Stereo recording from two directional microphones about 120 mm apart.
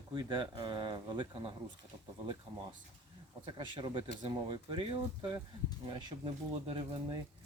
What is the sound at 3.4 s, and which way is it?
Speech, 45° right (ahead or behind).